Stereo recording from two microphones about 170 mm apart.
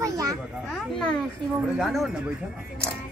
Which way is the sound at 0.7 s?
5° left (ahead or behind).